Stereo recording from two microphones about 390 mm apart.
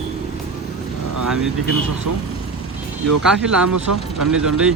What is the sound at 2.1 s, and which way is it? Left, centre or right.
Speech, right.